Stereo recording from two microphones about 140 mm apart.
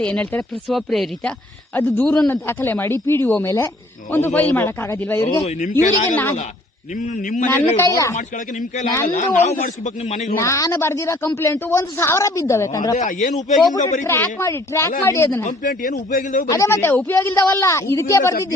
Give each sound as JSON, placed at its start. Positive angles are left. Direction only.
{"t": 0.0, "sound": "speech", "side_deg": 10}
{"t": 5.4, "sound": "speech", "side_deg": 55}
{"t": 7.8, "sound": "a woman's voice", "side_deg": 25}
{"t": 8.1, "sound": "speech", "side_deg": 60}
{"t": 10.3, "sound": "a woman's voice", "side_deg": 20}
{"t": 13.0, "sound": "a man's voice", "side_deg": 70}
{"t": 14.0, "sound": "a woman's voice", "side_deg": 15}
{"t": 15.4, "sound": "a man's voice", "side_deg": 70}
{"t": 16.5, "sound": "a woman's voice", "side_deg": 20}